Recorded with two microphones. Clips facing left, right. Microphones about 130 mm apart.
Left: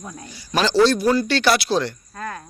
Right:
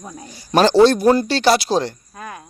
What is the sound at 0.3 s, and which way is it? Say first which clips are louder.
Speech: right 7 dB; 45° right (ahead or behind).